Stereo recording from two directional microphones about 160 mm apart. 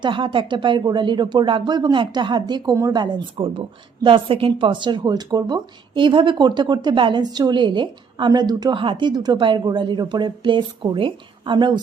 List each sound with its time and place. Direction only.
0.0 s a woman's voice: 30° right (ahead or behind)